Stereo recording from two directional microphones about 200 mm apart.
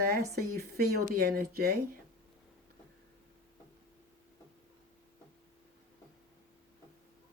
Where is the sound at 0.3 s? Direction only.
50° right (ahead or behind).